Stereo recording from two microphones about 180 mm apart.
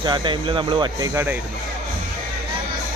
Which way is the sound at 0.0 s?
25° right (ahead or behind).